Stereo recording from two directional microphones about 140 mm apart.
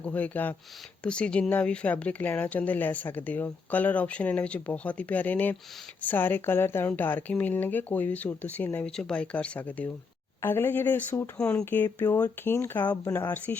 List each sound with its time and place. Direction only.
0.0 s speech: 10° left (ahead or behind)